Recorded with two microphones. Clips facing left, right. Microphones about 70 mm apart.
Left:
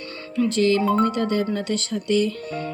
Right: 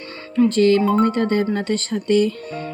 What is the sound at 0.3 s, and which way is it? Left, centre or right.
Speech, right.